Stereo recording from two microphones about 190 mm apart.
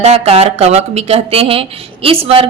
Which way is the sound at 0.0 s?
35° right (ahead or behind).